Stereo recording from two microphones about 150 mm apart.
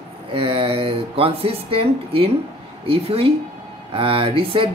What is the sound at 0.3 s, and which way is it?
Speech, 40° right (ahead or behind).